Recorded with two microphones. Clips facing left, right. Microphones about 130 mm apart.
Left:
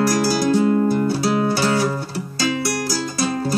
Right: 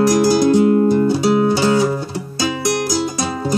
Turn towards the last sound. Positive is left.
turn(degrees=-20)  # may be behind; listen again after turning